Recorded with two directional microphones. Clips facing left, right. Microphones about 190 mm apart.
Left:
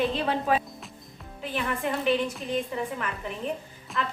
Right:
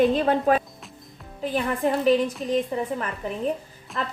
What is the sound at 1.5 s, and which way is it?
A woman's voice, 35° right (ahead or behind).